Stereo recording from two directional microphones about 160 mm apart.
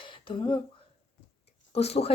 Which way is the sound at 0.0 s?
30° left (ahead or behind).